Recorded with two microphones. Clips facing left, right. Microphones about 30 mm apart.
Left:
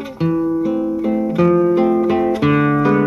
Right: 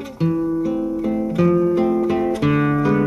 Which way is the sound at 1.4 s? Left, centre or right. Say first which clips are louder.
Left 3 dB; centre.